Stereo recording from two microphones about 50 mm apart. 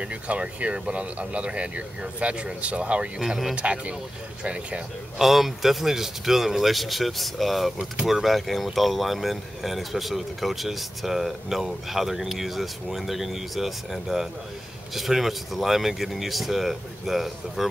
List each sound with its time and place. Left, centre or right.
0.0 s speech: right
3.2 s speech: centre
3.5 s speech: right
5.2 s speech: centre